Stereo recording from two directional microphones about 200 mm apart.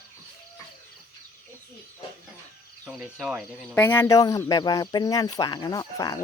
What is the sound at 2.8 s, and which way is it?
Speech, centre (ahead or behind).